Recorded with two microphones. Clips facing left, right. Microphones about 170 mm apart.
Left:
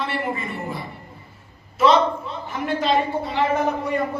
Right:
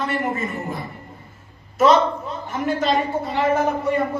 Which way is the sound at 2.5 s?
45° right (ahead or behind).